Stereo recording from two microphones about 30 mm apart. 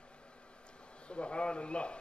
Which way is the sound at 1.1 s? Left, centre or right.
Left.